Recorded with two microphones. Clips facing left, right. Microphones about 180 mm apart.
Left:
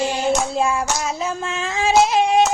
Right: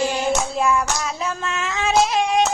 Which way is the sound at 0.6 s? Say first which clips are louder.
Even; 30° left (ahead or behind).